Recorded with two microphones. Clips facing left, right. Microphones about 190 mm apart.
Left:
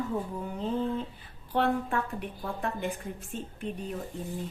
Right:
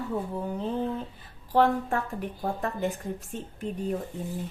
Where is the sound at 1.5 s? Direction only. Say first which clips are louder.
Right 4 dB; 45° right (ahead or behind).